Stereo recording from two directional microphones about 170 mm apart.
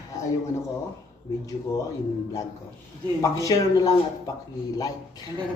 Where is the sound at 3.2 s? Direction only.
20° left (ahead or behind).